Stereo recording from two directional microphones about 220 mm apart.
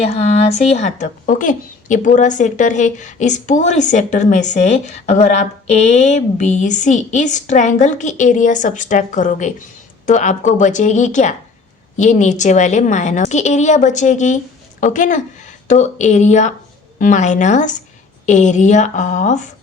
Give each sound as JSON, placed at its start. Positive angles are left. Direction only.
{"t": 0.0, "sound": "speech", "side_deg": 30}